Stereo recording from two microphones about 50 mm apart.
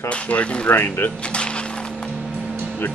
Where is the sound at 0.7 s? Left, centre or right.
Left.